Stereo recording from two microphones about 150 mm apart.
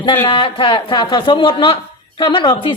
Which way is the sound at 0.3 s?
35° left (ahead or behind).